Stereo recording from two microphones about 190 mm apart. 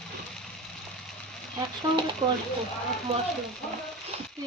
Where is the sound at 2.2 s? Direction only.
30° right (ahead or behind).